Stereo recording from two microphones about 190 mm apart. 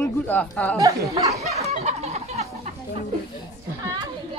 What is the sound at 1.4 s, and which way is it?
Chicken, 35° right (ahead or behind).